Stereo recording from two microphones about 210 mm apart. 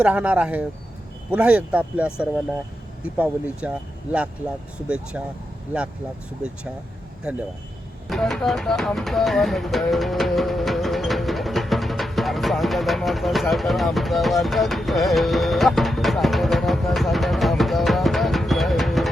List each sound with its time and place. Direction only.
0.0 s speech: 5° right (ahead or behind)
8.1 s music: centre (ahead or behind)